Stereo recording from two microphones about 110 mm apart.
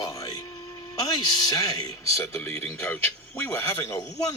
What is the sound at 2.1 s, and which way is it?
A man's voice, 25° left (ahead or behind).